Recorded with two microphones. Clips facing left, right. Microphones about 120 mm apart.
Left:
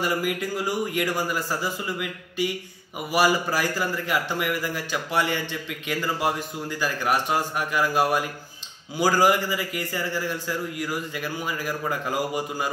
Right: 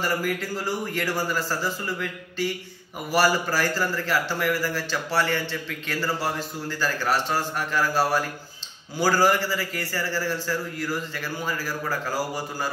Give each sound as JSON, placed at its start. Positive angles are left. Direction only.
{"t": 0.0, "sound": "a man's voice", "side_deg": 15}